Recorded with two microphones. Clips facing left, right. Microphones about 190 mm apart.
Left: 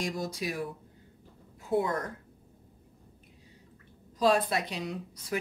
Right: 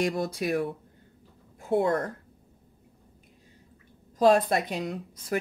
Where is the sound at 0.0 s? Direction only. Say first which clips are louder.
Right 6 dB; 60° right (ahead or behind).